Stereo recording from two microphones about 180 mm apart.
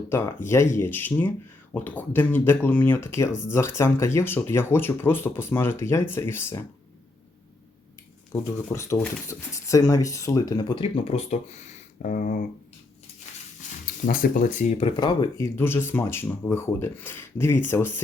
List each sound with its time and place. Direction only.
0.1 s speech: 15° left (ahead or behind)
8.3 s speech: 15° left (ahead or behind); by 11.3 s 35° left (ahead or behind)
12.0 s speech: 50° left (ahead or behind)
13.6 s a sound: 45° left (ahead or behind)
14.1 s speech: 50° left (ahead or behind)
14.9 s speech: 25° left (ahead or behind)